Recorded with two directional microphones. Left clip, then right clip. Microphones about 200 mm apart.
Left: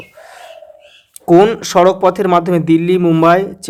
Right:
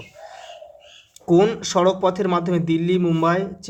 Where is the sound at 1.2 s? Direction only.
35° left (ahead or behind).